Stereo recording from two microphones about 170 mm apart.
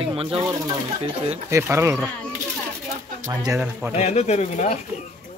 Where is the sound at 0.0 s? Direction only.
30° right (ahead or behind).